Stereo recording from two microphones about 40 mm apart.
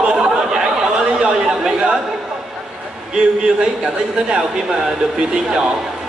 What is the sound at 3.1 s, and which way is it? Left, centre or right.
Speech, right.